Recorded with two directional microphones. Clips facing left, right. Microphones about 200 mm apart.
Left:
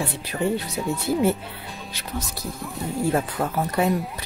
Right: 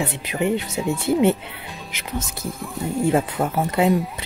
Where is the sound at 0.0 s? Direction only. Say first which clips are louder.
Right 2 dB; 20° right (ahead or behind).